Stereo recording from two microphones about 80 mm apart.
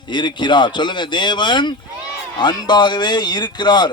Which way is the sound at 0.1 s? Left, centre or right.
Left.